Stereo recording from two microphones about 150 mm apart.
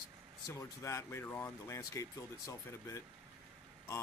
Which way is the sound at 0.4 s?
20° left (ahead or behind).